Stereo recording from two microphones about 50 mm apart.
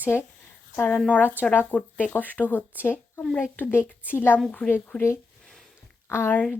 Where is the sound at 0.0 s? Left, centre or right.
Right.